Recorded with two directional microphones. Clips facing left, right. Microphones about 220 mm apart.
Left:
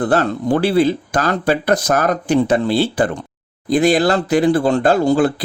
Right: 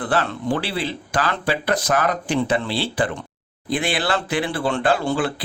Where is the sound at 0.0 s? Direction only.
40° left (ahead or behind).